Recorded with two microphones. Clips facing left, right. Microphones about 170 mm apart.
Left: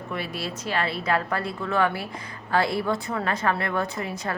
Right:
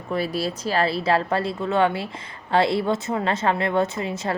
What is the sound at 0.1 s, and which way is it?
Speech, 35° right (ahead or behind).